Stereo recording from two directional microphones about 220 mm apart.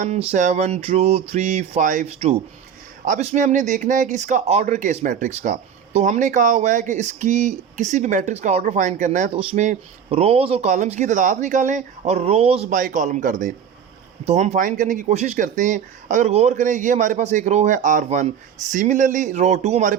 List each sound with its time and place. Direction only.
0.0 s speech: 30° right (ahead or behind)